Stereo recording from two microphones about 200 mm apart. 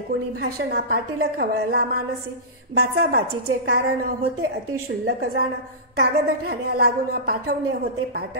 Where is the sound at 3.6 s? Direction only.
55° right (ahead or behind).